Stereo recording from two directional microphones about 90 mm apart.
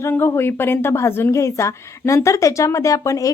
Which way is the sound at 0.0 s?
25° left (ahead or behind).